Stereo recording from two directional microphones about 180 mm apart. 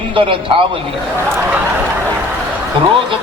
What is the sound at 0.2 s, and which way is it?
Speech, 30° right (ahead or behind).